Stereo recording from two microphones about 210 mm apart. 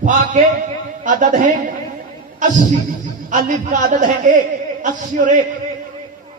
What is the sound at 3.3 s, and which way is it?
A man's voice, 35° right (ahead or behind).